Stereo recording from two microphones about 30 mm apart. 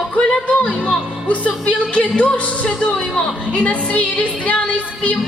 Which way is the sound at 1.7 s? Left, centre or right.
Left.